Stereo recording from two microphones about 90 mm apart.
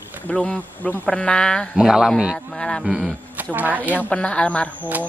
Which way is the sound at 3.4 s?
20° right (ahead or behind).